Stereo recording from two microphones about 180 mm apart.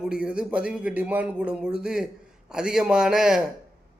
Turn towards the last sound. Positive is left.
turn(degrees=-5)  # may be behind; listen again after turning